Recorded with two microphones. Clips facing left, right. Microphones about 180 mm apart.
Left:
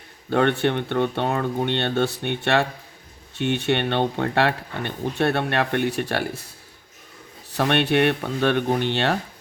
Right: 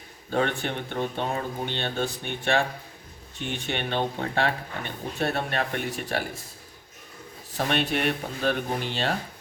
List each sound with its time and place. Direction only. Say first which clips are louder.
0.3 s speech: left 6 dB; 65° left (ahead or behind)
7.5 s speech: left 6 dB; 70° left (ahead or behind)